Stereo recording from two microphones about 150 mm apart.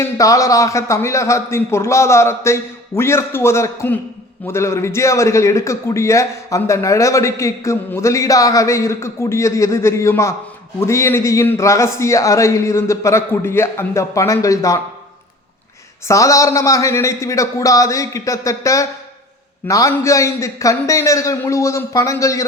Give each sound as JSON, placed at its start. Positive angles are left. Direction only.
{"t": 0.0, "sound": "a man's voice", "side_deg": 20}
{"t": 16.0, "sound": "a man's voice", "side_deg": 20}